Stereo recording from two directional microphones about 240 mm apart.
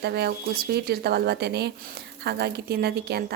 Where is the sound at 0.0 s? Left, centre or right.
Right.